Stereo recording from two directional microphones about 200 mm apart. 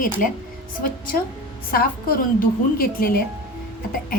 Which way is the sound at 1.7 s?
45° left (ahead or behind).